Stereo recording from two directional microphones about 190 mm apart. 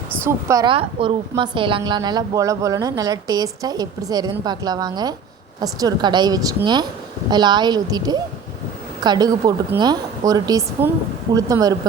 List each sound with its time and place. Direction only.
0.3 s a woman's voice: 15° right (ahead or behind)